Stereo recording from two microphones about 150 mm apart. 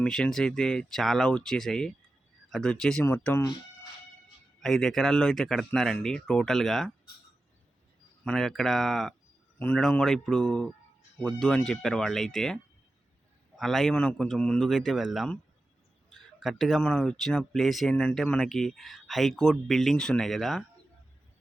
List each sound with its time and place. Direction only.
0.0 s speech: 5° left (ahead or behind)
3.1 s speech: 15° left (ahead or behind)
4.6 s speech: centre (ahead or behind)
8.2 s speech: 5° left (ahead or behind)
13.6 s speech: centre (ahead or behind)